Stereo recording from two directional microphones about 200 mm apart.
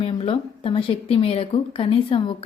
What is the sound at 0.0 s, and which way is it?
Speech, 30° left (ahead or behind).